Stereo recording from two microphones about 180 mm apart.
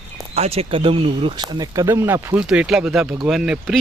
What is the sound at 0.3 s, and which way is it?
Speech, 35° right (ahead or behind).